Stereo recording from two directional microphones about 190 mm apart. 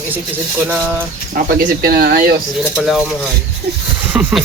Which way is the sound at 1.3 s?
50° right (ahead or behind).